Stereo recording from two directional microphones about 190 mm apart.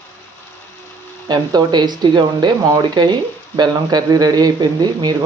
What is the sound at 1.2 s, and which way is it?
Speech, 20° right (ahead or behind).